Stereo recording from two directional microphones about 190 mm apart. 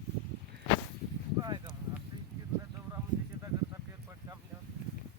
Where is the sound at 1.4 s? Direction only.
20° right (ahead or behind).